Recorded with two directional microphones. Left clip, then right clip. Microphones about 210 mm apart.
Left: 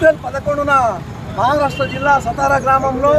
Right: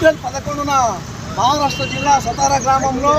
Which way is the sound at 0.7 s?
5° left (ahead or behind).